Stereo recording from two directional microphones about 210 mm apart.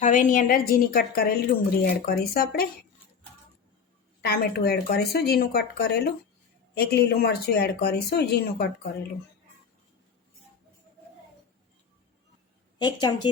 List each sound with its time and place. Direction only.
0.0 s a woman's voice: 35° left (ahead or behind)
4.2 s a woman's voice: 50° left (ahead or behind)
12.8 s a woman's voice: 20° left (ahead or behind)